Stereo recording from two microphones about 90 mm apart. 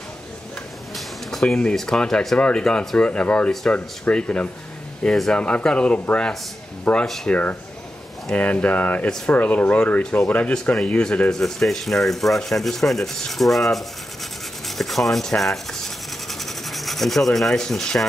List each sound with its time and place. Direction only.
0.9 s speech: centre (ahead or behind)
5.0 s rub: 5° left (ahead or behind)
5.4 s speech: 10° left (ahead or behind)
14.8 s rub: centre (ahead or behind)